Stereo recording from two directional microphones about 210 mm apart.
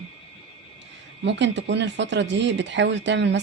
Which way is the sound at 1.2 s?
55° right (ahead or behind).